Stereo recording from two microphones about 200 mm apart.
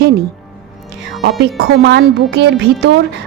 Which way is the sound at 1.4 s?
60° right (ahead or behind).